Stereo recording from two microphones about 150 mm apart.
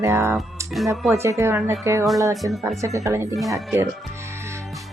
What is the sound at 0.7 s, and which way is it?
Speech, centre (ahead or behind).